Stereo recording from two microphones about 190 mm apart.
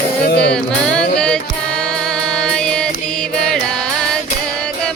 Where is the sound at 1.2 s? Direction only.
5° left (ahead or behind).